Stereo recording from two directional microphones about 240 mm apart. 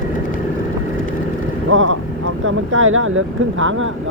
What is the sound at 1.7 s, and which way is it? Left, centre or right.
Speech, right.